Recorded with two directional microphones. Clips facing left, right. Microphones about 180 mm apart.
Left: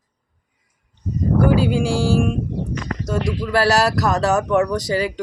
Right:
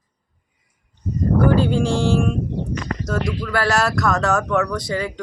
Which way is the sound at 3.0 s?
30° left (ahead or behind).